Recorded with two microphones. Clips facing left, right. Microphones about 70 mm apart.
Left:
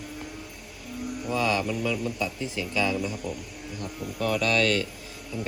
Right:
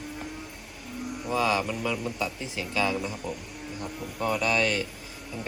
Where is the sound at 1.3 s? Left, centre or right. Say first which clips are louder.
Even; right.